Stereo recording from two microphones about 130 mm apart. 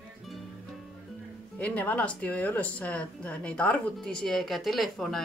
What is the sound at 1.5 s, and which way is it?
Speech, 10° left (ahead or behind).